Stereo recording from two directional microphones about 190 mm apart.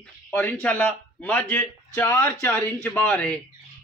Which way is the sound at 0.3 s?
10° left (ahead or behind).